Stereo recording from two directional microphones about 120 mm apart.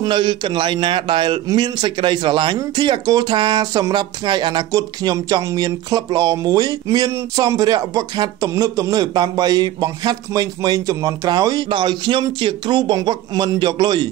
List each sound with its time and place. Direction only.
0.0 s a man's voice: 40° right (ahead or behind)